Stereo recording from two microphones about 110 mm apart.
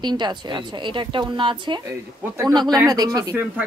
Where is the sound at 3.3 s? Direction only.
15° right (ahead or behind).